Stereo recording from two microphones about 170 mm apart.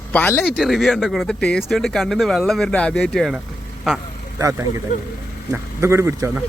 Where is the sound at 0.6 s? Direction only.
Centre (ahead or behind).